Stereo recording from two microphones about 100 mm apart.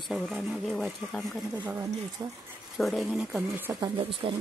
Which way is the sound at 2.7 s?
Centre (ahead or behind).